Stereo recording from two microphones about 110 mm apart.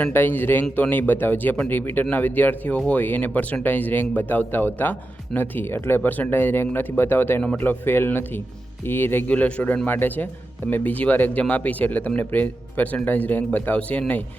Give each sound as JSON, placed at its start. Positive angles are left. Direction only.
{"t": 0.0, "sound": "a man's voice", "side_deg": 15}